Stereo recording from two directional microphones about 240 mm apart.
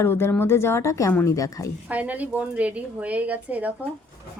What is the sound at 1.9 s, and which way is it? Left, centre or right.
A woman's voice, centre.